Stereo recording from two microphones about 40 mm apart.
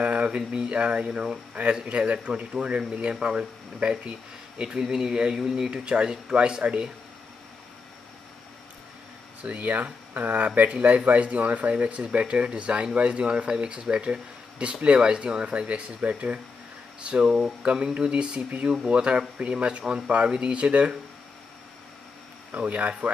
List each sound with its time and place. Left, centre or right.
0.0 s a sound: right
0.4 s speech: right
9.4 s speech: right
11.7 s speech: right
22.5 s speech: right